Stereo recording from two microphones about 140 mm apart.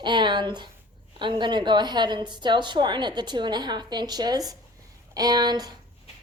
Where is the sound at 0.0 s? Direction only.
35° right (ahead or behind).